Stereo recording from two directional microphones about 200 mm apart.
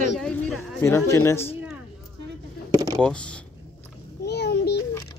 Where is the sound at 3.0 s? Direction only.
5° left (ahead or behind).